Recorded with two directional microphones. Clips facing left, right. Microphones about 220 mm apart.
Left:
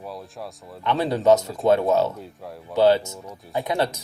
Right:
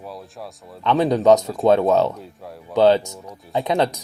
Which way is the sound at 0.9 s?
15° right (ahead or behind).